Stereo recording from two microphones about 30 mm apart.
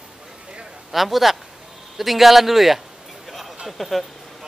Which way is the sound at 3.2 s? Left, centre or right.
Centre.